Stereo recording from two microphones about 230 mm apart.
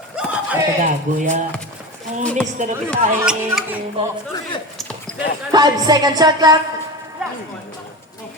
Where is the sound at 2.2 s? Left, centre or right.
Centre.